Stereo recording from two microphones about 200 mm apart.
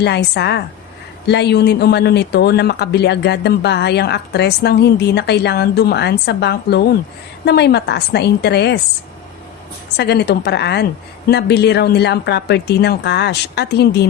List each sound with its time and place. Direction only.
0.0 s speech: 60° left (ahead or behind)
10.0 s speech: 55° left (ahead or behind)